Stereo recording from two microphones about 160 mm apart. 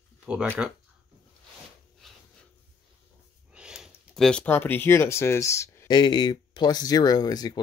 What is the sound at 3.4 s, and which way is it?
Speech, 5° right (ahead or behind).